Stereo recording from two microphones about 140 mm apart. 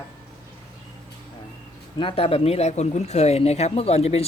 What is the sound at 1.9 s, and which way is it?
Speech, 40° left (ahead or behind).